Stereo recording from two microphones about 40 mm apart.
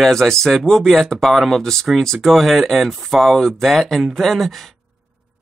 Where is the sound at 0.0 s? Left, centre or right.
Centre.